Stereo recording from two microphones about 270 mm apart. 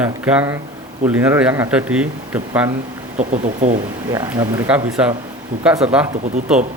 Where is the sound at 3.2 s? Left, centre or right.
Right.